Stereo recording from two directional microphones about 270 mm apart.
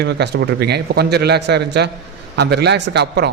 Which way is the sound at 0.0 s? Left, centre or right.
Right.